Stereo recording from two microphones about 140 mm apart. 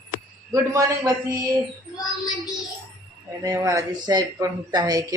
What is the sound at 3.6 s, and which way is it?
Speech, 25° right (ahead or behind).